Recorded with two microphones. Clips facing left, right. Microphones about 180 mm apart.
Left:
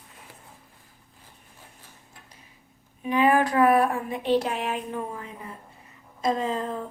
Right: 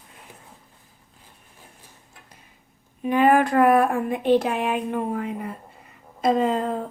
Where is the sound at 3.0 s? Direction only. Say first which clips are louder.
Right 3 dB; 50° right (ahead or behind); by 6.8 s 65° right (ahead or behind).